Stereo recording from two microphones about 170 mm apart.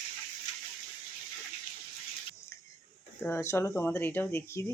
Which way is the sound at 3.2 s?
15° left (ahead or behind).